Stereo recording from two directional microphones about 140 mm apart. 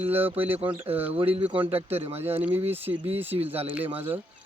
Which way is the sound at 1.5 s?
40° right (ahead or behind).